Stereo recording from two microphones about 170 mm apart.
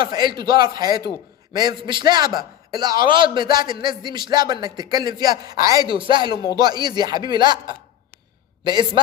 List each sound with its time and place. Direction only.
0.0 s speech: 25° right (ahead or behind)
8.6 s speech: 25° right (ahead or behind)